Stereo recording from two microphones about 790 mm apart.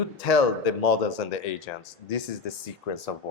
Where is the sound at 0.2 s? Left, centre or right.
Left.